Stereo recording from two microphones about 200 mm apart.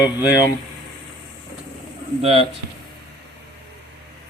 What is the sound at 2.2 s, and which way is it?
Speech, 30° right (ahead or behind).